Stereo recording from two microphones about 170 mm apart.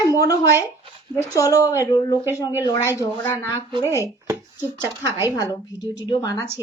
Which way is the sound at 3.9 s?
15° right (ahead or behind).